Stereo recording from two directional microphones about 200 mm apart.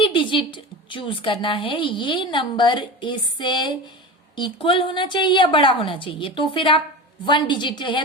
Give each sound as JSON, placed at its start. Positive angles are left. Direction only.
{"t": 0.0, "sound": "a woman's voice", "side_deg": 25}